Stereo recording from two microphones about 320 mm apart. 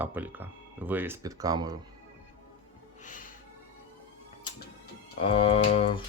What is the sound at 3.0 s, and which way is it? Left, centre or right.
Music, left.